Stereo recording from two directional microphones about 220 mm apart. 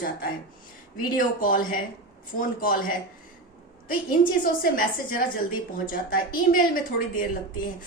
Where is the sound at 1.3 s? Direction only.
40° left (ahead or behind).